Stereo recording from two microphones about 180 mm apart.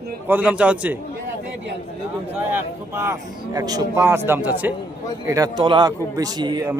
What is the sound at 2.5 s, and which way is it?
A man's voice, 15° right (ahead or behind).